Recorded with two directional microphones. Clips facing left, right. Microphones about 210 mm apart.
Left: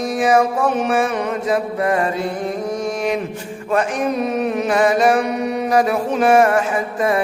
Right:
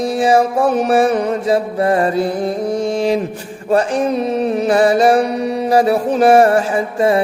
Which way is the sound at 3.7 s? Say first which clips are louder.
Right 4 dB; 30° right (ahead or behind).